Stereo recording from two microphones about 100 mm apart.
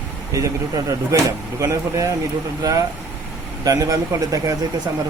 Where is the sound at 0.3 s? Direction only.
35° right (ahead or behind).